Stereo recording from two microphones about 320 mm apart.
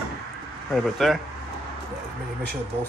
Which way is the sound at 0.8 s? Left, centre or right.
Centre.